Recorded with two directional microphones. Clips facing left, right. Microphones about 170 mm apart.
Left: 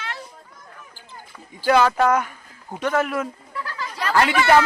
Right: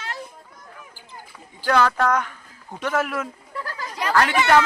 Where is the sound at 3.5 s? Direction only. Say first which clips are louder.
Left 1 dB; 40° right (ahead or behind).